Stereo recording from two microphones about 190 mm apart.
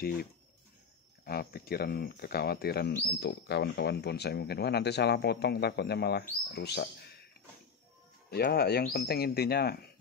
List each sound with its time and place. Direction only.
1.2 s speech: 55° left (ahead or behind)
8.3 s speech: 55° left (ahead or behind)